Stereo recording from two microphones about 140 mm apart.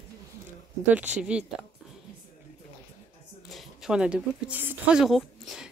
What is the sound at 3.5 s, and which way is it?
Speech, centre (ahead or behind).